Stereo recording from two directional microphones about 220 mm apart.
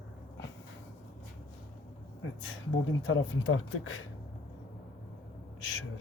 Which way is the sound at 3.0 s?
65° left (ahead or behind).